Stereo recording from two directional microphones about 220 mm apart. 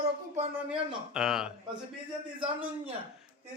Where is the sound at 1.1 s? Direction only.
5° right (ahead or behind).